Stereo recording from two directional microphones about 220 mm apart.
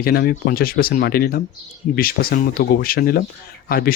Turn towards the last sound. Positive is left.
turn(degrees=45)  # may be behind; listen again after turning